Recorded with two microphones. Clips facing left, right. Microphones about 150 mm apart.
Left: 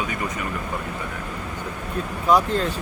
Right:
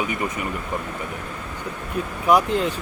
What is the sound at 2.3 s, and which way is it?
Speech, 10° right (ahead or behind).